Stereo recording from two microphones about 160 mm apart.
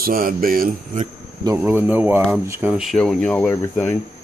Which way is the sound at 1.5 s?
10° right (ahead or behind).